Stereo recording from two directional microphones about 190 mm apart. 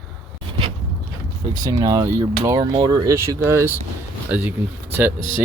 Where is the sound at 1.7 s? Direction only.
20° right (ahead or behind).